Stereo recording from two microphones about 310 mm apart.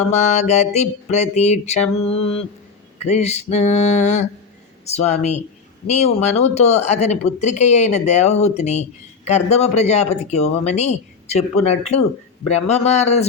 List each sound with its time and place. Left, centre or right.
0.1 s speech: left